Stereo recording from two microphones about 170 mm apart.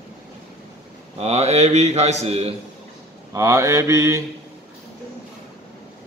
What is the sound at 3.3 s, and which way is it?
Mantra, 20° right (ahead or behind).